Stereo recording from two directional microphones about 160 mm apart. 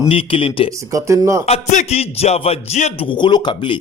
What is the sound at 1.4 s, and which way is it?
A man's voice, 45° left (ahead or behind).